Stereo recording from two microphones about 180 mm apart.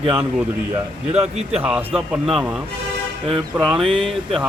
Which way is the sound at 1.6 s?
5° right (ahead or behind).